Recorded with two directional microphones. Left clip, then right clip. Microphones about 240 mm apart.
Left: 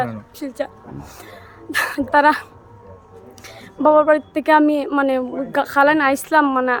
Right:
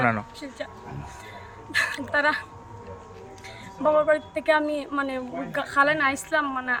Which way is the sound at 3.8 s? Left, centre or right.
Centre.